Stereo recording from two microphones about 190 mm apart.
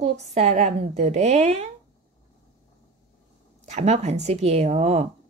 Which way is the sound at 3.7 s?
35° right (ahead or behind).